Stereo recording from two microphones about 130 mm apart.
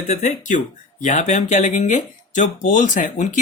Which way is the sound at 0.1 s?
70° left (ahead or behind).